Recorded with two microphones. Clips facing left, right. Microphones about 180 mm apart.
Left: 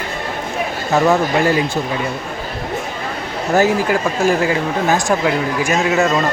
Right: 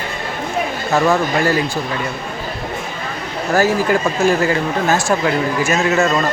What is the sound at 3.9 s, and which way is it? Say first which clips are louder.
Speech: right 1 dB; 10° left (ahead or behind).